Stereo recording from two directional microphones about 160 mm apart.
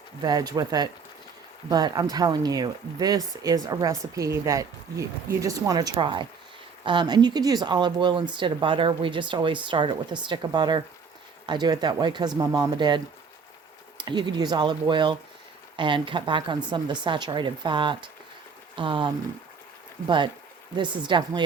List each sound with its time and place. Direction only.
0.2 s speech: 25° right (ahead or behind)
14.0 s speech: 30° right (ahead or behind)